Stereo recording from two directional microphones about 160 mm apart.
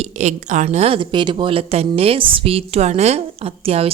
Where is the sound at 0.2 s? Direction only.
45° right (ahead or behind).